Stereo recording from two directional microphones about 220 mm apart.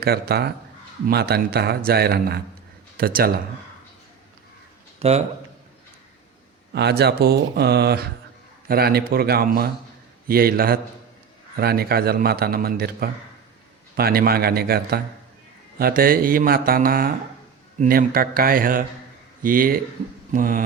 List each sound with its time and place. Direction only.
0.0 s a man's voice: 45° right (ahead or behind)
4.9 s speech: 30° right (ahead or behind)
6.7 s a man's voice: 50° right (ahead or behind)